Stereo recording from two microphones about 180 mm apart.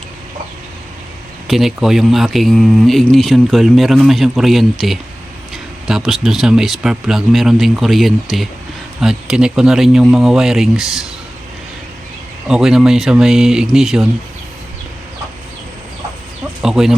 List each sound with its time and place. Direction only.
1.5 s speech: centre (ahead or behind)
12.5 s speech: 5° right (ahead or behind)
16.6 s speech: 5° right (ahead or behind)